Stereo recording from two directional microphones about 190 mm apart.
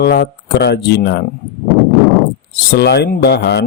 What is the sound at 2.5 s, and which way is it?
A man's voice, 60° left (ahead or behind).